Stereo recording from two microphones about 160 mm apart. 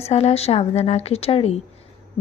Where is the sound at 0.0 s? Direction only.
40° left (ahead or behind).